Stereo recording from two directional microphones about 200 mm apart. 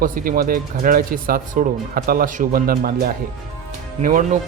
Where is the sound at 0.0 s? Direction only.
45° right (ahead or behind).